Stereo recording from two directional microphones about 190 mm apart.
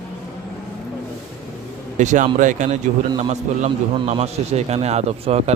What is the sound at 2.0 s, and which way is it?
Speech, 40° right (ahead or behind).